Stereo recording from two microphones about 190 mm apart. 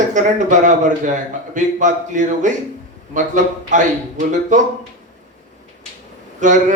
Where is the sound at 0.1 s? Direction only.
40° right (ahead or behind).